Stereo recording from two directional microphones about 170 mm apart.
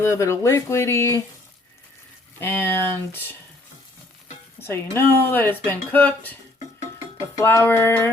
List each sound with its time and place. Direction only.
0.0 s speech: 15° left (ahead or behind)
2.4 s speech: 10° left (ahead or behind)
4.6 s speech: 15° left (ahead or behind)
7.3 s speech: 15° left (ahead or behind)